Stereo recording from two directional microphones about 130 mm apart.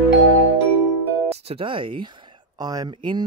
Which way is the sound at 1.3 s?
50° right (ahead or behind).